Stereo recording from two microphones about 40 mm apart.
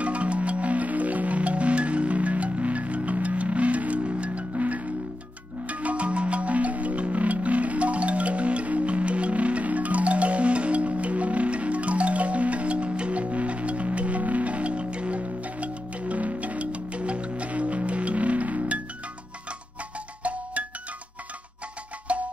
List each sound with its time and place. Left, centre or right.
0.0 s music: right
22.0 s music: right